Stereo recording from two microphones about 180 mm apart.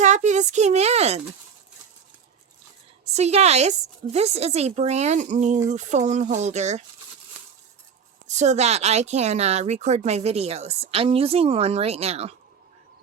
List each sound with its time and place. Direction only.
0.0 s speech: 40° right (ahead or behind)
3.0 s a woman's voice: 35° right (ahead or behind)
8.4 s a woman's voice: 40° right (ahead or behind)